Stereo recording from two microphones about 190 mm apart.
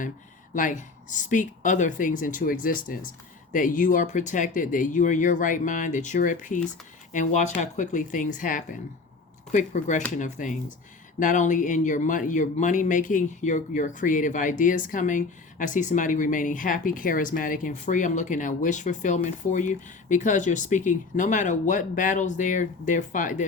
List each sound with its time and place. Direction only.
0.5 s speech: 40° left (ahead or behind)